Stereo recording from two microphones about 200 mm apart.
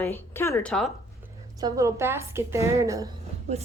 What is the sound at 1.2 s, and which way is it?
A woman's voice, 15° right (ahead or behind).